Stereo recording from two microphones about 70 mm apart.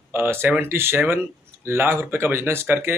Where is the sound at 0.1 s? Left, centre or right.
Right.